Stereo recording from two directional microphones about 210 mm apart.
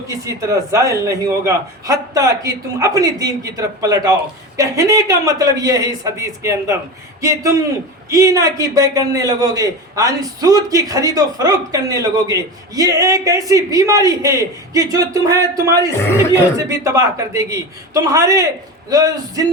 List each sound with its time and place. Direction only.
0.1 s a man's voice: 15° right (ahead or behind)